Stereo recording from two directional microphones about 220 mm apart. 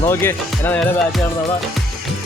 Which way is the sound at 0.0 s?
10° left (ahead or behind).